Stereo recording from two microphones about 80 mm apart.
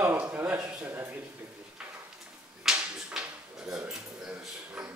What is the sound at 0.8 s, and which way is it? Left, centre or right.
Speech, right.